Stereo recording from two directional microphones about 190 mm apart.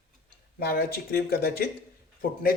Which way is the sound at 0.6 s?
50° left (ahead or behind).